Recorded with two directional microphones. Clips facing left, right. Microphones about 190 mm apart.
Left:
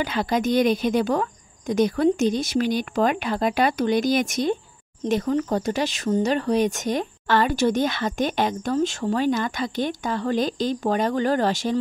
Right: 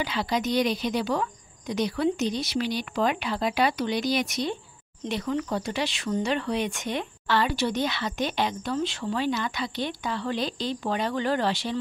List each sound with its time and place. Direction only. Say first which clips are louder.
0.0 s speech: left 4 dB; 50° left (ahead or behind)